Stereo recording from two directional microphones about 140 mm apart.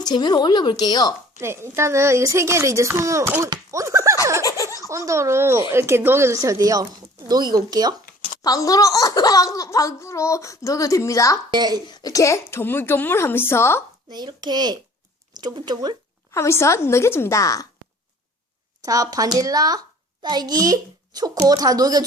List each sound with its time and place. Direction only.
0.0 s a woman's voice: 30° left (ahead or behind)
1.4 s speech: 20° right (ahead or behind)
3.5 s a sound: 20° right (ahead or behind)
4.4 s laughter: 25° left (ahead or behind)
4.9 s speech: 20° right (ahead or behind)
8.4 s speech: 25° left (ahead or behind)
11.5 s a child's voice: 30° right (ahead or behind)
11.9 s a woman's voice: 25° left (ahead or behind)
14.1 s a child's voice: 30° right (ahead or behind)
16.3 s speech: 20° left (ahead or behind)
18.8 s speech: 25° right (ahead or behind)